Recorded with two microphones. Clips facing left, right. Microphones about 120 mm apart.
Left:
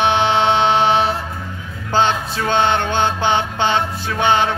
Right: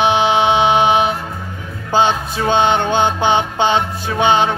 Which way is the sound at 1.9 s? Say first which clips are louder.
Right 2 dB; 15° right (ahead or behind).